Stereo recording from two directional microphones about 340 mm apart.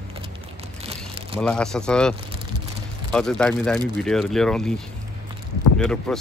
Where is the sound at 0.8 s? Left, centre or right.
Centre.